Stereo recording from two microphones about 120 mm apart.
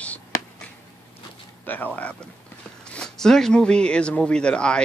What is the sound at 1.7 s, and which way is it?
Speech, 15° left (ahead or behind).